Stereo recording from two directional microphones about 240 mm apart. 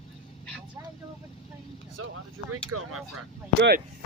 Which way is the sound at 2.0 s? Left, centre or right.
Right.